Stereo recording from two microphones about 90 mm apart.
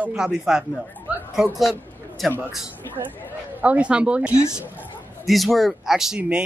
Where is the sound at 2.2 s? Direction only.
Centre (ahead or behind).